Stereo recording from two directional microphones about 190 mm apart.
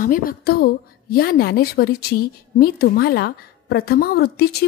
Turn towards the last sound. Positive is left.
turn(degrees=55)  # may be behind; listen again after turning